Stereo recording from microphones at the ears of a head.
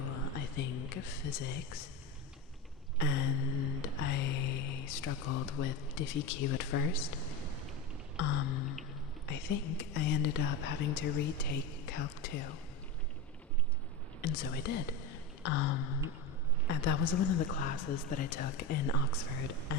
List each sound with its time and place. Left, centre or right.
0.0 s a sound: left
3.0 s music: left
8.1 s speech: left
14.2 s speech: left